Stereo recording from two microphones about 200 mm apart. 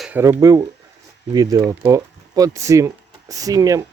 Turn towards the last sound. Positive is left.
turn(degrees=-15)  # may be behind; listen again after turning